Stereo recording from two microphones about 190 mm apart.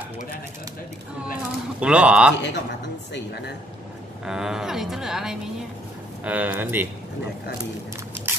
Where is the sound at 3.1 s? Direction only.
60° left (ahead or behind).